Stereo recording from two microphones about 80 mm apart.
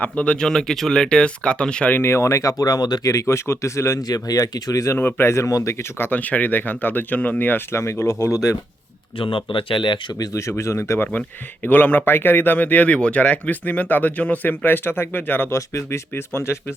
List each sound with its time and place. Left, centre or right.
0.0 s speech: centre
2.0 s speech: left
3.1 s speech: left
4.9 s speech: left
5.3 s speech: left
6.0 s speech: left
9.1 s speech: left
10.2 s speech: left
11.6 s speech: left